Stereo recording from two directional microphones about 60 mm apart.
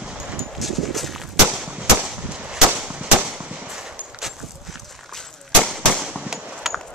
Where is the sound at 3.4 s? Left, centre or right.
Right.